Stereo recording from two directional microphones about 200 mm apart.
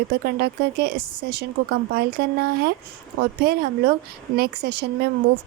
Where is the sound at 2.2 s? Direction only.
50° right (ahead or behind).